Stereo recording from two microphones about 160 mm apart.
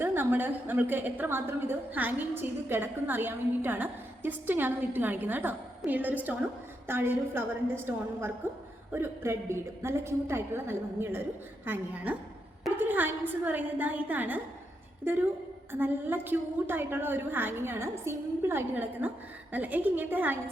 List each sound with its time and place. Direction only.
0.0 s a woman's voice: 15° right (ahead or behind)
8.9 s a woman's voice: 15° right (ahead or behind)
15.7 s a woman's voice: 15° right (ahead or behind)